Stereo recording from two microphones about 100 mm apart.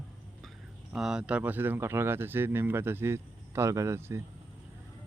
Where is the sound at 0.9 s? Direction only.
5° right (ahead or behind); by 4.2 s 30° right (ahead or behind).